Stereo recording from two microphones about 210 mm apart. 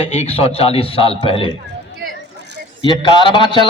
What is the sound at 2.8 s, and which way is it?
Speech, 20° left (ahead or behind).